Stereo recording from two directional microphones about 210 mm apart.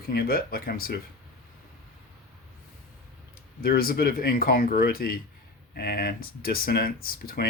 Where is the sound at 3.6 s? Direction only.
45° left (ahead or behind).